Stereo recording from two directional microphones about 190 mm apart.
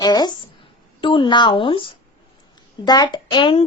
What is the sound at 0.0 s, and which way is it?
A child's voice, 20° left (ahead or behind).